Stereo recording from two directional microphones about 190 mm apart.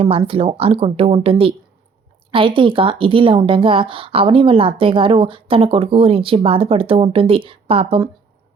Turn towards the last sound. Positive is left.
turn(degrees=-30)  # may be behind; listen again after turning